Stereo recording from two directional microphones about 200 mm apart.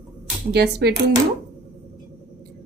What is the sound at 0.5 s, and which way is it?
Speech, 55° right (ahead or behind).